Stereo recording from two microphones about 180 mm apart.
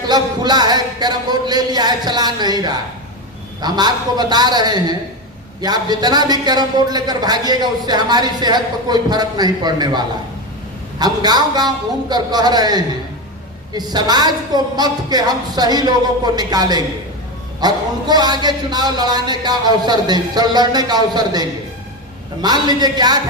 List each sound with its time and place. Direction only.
0.1 s a sound: 25° right (ahead or behind)
3.6 s speech: 25° right (ahead or behind)
11.0 s speech: 20° right (ahead or behind)